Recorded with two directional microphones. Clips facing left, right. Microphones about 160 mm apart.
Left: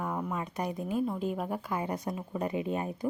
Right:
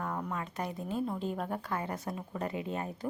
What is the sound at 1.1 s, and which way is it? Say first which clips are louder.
A woman's voice: left 2 dB; 5° left (ahead or behind).